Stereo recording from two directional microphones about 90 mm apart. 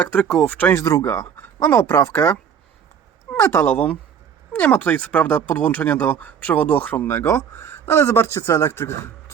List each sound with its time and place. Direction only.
0.0 s speech: 15° left (ahead or behind)
0.7 s speech: 30° left (ahead or behind)